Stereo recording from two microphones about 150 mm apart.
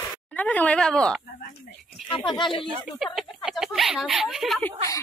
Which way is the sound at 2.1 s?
35° left (ahead or behind).